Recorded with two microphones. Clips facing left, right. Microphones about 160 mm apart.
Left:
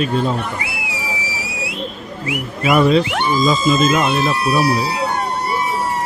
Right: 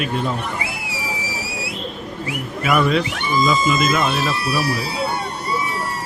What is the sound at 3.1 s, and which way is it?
Speech, 70° left (ahead or behind).